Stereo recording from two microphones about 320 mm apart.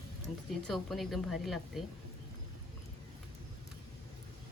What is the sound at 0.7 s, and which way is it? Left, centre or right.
A woman's voice, centre.